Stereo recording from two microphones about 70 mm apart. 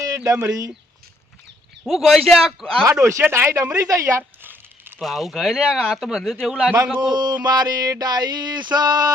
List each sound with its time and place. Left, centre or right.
0.3 s speech: right
1.8 s speech: centre
3.0 s speech: right
4.9 s speech: centre
7.1 s a sound: right
7.4 s a sound: right